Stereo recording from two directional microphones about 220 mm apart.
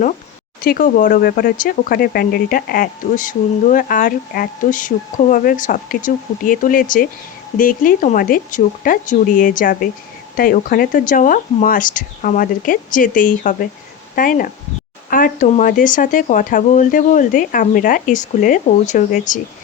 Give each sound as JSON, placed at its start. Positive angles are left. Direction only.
{"t": 0.6, "sound": "speech", "side_deg": 40}